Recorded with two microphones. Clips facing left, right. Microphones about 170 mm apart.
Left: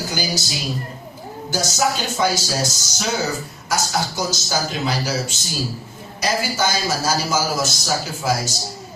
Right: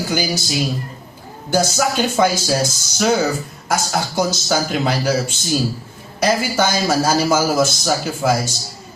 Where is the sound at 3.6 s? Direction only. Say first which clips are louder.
Right 2 dB; 55° right (ahead or behind).